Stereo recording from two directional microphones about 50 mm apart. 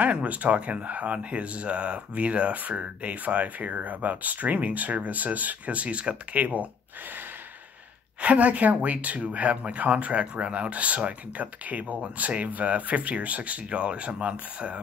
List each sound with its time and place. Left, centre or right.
0.0 s speech: right
8.2 s speech: right